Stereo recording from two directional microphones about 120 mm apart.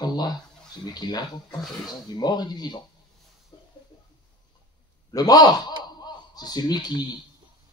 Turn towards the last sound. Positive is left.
turn(degrees=35)  # may be behind; listen again after turning